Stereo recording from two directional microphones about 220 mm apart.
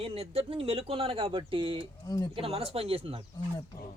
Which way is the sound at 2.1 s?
15° left (ahead or behind).